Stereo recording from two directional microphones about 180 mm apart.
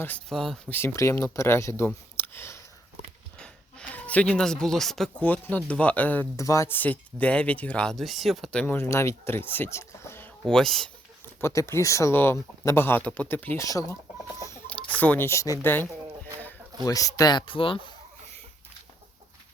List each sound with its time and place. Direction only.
0.0 s speech: 5° left (ahead or behind)
11.3 s speech: 15° left (ahead or behind)
14.3 s chicken: 15° left (ahead or behind)
15.6 s speech: 10° left (ahead or behind); by 17.9 s 30° left (ahead or behind)